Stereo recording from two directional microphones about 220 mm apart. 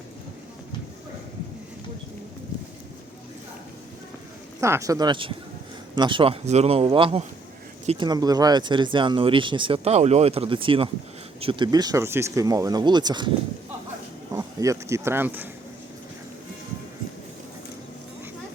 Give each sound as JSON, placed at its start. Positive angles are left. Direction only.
{"t": 4.6, "sound": "speech", "side_deg": -15}
{"t": 14.3, "sound": "speech", "side_deg": -15}